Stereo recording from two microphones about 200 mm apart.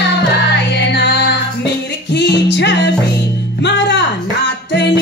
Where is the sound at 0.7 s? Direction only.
55° left (ahead or behind).